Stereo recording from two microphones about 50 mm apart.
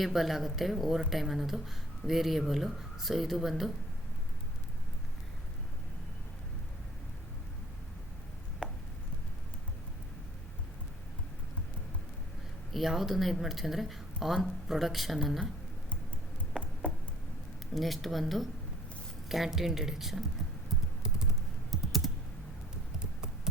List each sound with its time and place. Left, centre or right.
0.0 s speech: centre
12.7 s speech: centre
16.8 s a sound: left
17.7 s speech: centre
21.0 s typing: centre
21.7 s typing: centre